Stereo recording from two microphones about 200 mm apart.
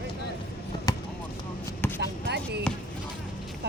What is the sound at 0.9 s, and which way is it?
Basketball bounce, 15° left (ahead or behind).